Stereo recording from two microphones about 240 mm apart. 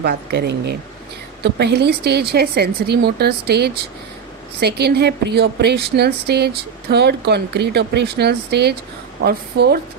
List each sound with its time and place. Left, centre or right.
0.0 s a woman's voice: right